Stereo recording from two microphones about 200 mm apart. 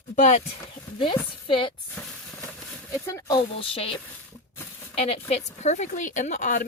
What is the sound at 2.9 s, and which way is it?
Speech, 15° left (ahead or behind).